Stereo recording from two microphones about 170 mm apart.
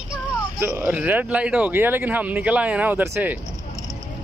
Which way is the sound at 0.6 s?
15° right (ahead or behind).